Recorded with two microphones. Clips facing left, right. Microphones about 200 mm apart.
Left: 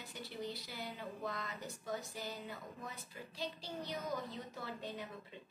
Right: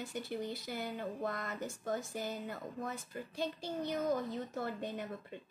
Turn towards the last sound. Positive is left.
turn(degrees=-50)  # may be behind; listen again after turning